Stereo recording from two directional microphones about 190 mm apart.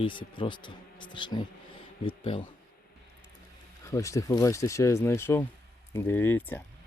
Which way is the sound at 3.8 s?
15° left (ahead or behind).